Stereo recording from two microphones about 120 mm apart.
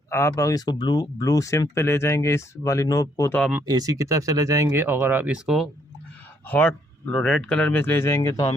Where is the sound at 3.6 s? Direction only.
35° right (ahead or behind); by 5.6 s 5° right (ahead or behind).